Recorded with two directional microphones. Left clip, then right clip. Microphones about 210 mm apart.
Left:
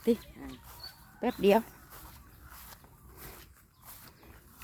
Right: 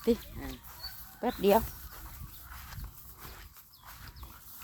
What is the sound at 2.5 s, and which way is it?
Dog, centre (ahead or behind).